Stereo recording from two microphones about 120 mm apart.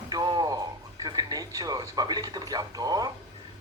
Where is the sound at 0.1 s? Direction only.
35° right (ahead or behind).